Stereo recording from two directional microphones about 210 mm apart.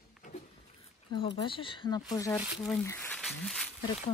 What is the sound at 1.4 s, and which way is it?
Speech, 25° left (ahead or behind).